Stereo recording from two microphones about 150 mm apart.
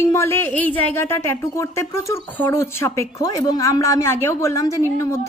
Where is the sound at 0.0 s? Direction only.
15° left (ahead or behind).